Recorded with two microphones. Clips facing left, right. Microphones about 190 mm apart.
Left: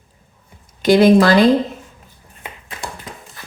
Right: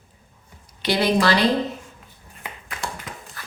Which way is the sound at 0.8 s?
50° left (ahead or behind).